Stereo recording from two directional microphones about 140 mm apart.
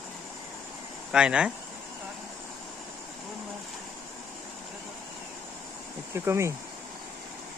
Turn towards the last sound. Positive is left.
turn(degrees=-20)  # may be behind; listen again after turning